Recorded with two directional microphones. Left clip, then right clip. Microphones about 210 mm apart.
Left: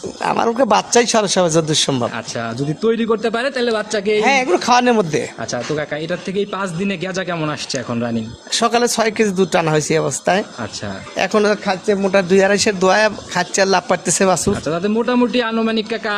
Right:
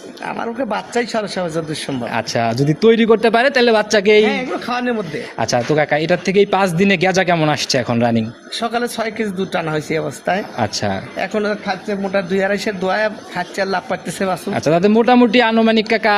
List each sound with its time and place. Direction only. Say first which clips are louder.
0.3 s a man's voice: left 7 dB; 50° left (ahead or behind)
2.1 s a man's voice: right 6 dB; 25° right (ahead or behind)
4.3 s speech: left 7 dB; 60° left (ahead or behind)
5.4 s speech: right 6 dB; 30° right (ahead or behind)
8.5 s a man's voice: left 5 dB; 50° left (ahead or behind)
14.6 s a man's voice: right 5 dB; 30° right (ahead or behind)